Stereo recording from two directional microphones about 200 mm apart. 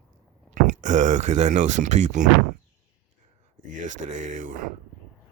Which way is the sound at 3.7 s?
40° right (ahead or behind).